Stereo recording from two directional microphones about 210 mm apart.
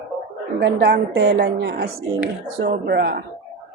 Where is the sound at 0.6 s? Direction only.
55° right (ahead or behind).